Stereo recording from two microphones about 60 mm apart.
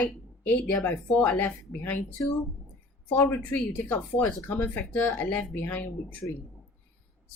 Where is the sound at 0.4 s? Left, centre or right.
Left.